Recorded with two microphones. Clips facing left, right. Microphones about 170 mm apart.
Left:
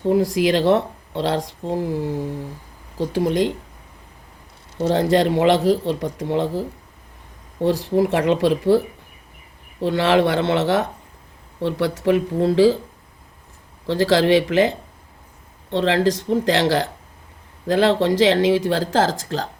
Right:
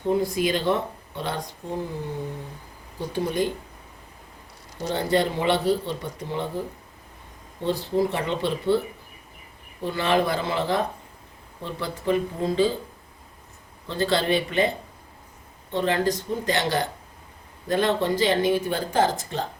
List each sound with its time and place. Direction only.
0.1 s speech: 90° left
2.1 s humming: 30° left (ahead or behind)
3.1 s speech: 90° left
4.8 s speech: 80° left
9.8 s speech: 85° left
13.8 s speech: 90° left